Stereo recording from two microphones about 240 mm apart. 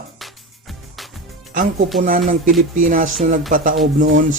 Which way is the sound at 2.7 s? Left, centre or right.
Right.